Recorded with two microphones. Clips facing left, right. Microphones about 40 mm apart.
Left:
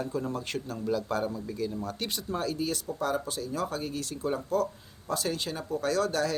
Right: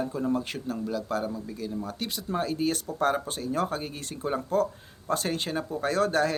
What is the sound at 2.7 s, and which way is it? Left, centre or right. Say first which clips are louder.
Speech: right 4 dB; right.